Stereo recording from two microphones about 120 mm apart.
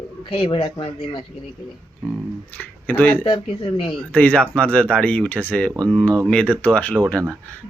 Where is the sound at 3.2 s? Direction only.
45° left (ahead or behind).